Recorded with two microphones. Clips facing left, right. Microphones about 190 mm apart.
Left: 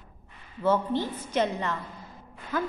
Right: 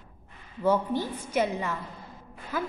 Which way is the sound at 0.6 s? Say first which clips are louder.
Even; 10° right (ahead or behind).